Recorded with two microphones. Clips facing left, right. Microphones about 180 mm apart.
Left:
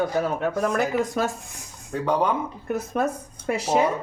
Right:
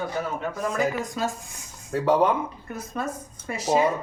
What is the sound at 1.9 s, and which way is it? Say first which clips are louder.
Speech: right 2 dB; 5° right (ahead or behind).